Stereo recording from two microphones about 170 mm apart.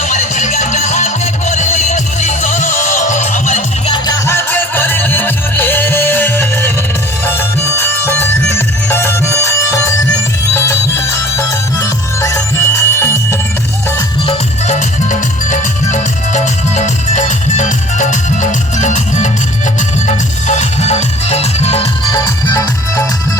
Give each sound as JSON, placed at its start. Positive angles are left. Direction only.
{"t": 0.1, "sound": "music", "side_deg": 45}
{"t": 4.3, "sound": "music", "side_deg": 15}
{"t": 14.3, "sound": "music", "side_deg": 45}
{"t": 22.0, "sound": "music", "side_deg": 20}